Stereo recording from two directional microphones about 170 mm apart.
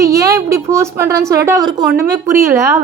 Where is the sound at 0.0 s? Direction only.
20° right (ahead or behind).